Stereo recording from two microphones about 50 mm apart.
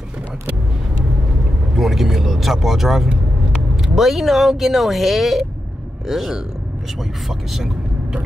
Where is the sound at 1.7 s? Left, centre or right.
Centre.